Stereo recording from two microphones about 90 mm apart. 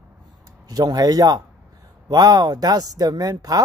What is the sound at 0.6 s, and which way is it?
A man's voice, 45° right (ahead or behind).